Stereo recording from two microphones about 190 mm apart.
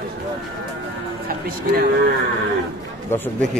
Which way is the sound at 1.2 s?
50° right (ahead or behind).